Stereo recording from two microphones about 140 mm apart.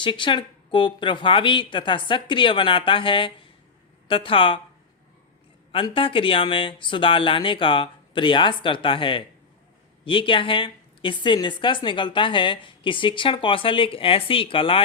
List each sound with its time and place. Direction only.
0.0 s speech: 35° left (ahead or behind)
5.7 s speech: 40° left (ahead or behind)